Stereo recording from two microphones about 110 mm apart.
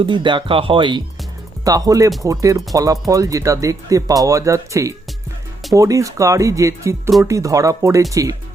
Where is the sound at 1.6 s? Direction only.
35° right (ahead or behind).